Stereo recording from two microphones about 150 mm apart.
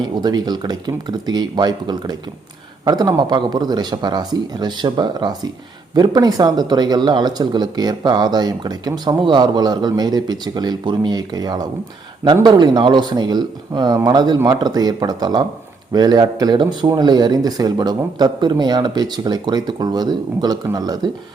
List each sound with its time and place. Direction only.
0.0 s speech: 30° right (ahead or behind)